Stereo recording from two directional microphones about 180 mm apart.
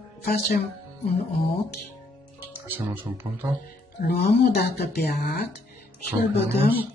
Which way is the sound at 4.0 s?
60° left (ahead or behind).